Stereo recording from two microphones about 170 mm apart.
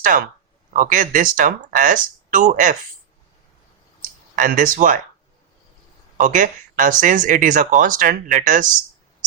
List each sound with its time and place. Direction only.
0.7 s speech: 50° right (ahead or behind)
4.4 s speech: 55° right (ahead or behind)
6.1 s speech: 50° right (ahead or behind)